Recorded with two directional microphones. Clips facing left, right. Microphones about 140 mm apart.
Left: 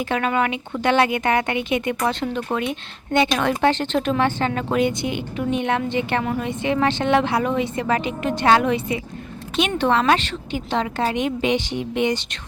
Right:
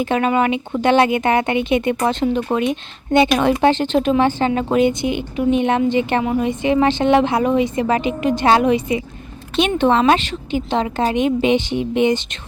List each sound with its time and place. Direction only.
0.0 s a woman's voice: 20° right (ahead or behind)